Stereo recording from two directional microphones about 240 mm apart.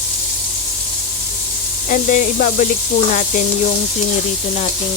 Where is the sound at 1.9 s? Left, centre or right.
Left.